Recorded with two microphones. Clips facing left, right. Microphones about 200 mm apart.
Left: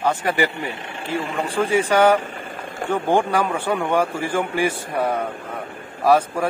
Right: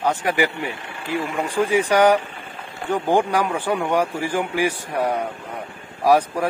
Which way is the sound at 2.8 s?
45° left (ahead or behind).